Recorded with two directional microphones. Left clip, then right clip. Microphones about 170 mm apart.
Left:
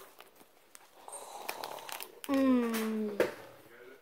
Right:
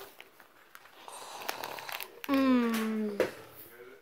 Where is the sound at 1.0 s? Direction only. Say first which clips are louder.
Right 1 dB; 35° right (ahead or behind).